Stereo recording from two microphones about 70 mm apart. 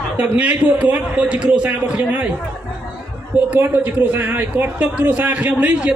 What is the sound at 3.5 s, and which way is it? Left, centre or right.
A man's voice, right.